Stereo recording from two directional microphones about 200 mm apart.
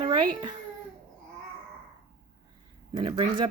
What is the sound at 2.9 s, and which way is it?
Speech, 20° right (ahead or behind).